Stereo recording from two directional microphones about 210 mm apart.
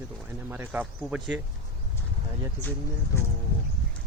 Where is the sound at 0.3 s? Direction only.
10° right (ahead or behind).